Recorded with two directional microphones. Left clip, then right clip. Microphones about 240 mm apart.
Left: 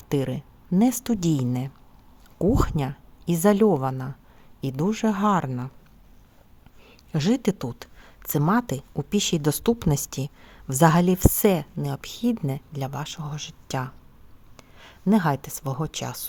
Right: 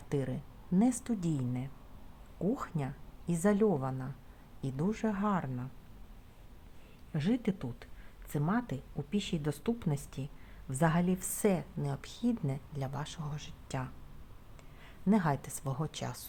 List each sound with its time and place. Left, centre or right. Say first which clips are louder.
0.1 s speech: left 10 dB; left
7.1 s speech: left 10 dB; left